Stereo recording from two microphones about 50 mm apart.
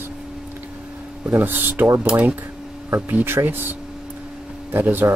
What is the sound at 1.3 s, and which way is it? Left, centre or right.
Speech, right.